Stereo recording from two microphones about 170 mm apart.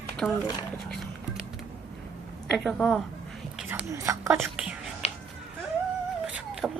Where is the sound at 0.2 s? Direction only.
Centre (ahead or behind).